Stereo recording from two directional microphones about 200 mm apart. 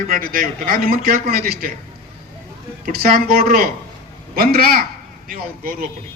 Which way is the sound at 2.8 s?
45° right (ahead or behind).